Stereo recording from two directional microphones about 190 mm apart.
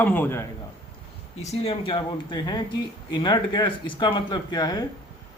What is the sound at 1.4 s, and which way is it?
Speech, 35° left (ahead or behind).